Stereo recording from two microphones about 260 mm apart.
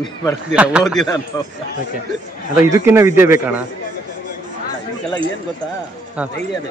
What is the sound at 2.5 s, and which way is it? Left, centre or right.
Speech, centre.